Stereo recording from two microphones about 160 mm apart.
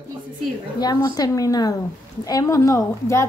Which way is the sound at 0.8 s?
25° left (ahead or behind).